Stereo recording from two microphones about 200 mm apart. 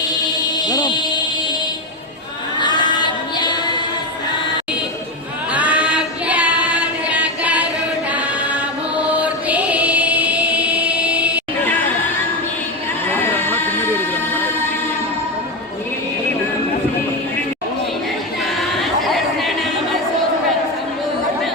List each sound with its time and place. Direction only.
0.7 s a sound: 20° left (ahead or behind)
2.6 s female singing: 20° left (ahead or behind)
5.5 s female singing: 5° right (ahead or behind)
7.1 s singing: 5° right (ahead or behind)
9.0 s music: 5° right (ahead or behind)
13.1 s a sound: 10° left (ahead or behind)
18.8 s chatter: centre (ahead or behind)